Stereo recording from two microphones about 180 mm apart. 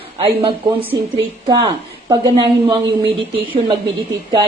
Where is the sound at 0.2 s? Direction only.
30° right (ahead or behind).